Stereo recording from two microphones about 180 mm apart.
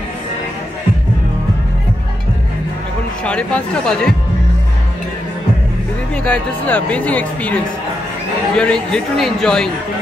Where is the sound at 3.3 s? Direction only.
5° left (ahead or behind).